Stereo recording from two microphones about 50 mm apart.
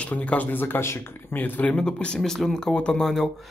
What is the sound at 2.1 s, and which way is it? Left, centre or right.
Speech, centre.